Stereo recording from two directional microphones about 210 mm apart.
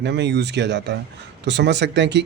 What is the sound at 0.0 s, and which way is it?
Speech, 55° right (ahead or behind).